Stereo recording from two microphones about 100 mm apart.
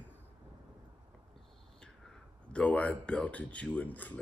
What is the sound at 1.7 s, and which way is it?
Speech, 5° left (ahead or behind).